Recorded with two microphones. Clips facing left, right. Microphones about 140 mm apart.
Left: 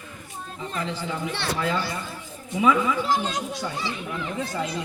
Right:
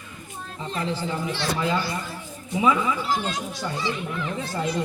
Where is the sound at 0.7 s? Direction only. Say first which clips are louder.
Right 3 dB; 35° right (ahead or behind).